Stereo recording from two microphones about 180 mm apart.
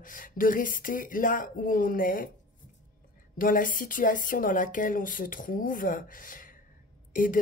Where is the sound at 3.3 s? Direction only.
50° left (ahead or behind).